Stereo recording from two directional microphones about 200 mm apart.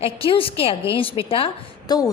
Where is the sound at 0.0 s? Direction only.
25° left (ahead or behind).